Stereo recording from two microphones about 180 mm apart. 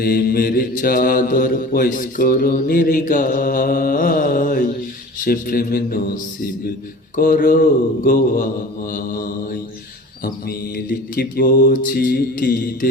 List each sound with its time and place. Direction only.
0.0 s mantra: 55° left (ahead or behind)
7.2 s mantra: 50° left (ahead or behind)